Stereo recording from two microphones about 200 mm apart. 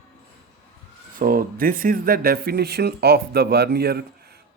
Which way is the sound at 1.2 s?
45° right (ahead or behind).